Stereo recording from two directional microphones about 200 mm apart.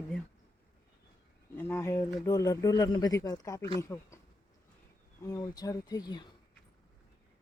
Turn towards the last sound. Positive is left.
turn(degrees=20)  # may be behind; listen again after turning